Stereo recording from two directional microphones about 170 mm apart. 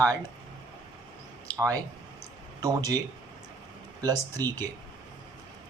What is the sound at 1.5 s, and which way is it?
Speech, 20° right (ahead or behind).